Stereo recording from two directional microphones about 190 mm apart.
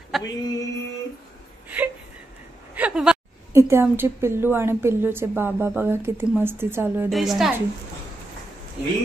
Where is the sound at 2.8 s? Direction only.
5° right (ahead or behind).